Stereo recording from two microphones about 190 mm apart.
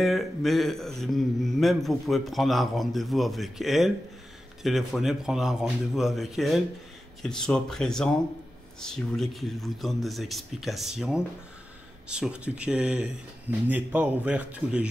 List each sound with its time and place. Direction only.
0.0 s speech: centre (ahead or behind)